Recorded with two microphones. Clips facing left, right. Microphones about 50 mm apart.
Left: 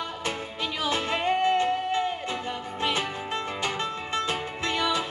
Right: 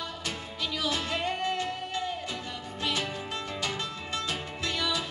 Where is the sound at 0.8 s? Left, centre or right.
Left.